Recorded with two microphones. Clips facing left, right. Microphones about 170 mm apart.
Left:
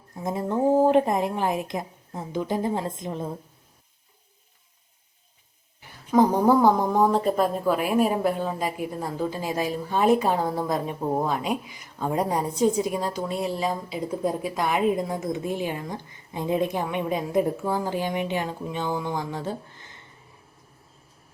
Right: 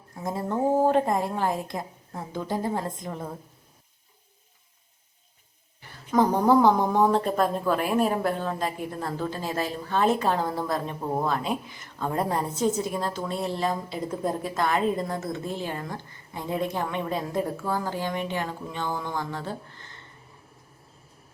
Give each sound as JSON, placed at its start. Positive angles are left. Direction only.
{"t": 0.2, "sound": "a woman's voice", "side_deg": 20}
{"t": 6.1, "sound": "a woman's voice", "side_deg": 10}